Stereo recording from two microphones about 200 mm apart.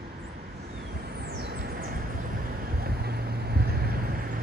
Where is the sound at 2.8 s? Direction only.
50° right (ahead or behind).